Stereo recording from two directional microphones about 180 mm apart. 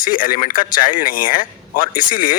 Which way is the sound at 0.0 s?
50° left (ahead or behind).